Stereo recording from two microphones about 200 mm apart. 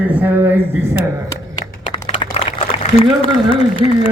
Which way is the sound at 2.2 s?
30° left (ahead or behind).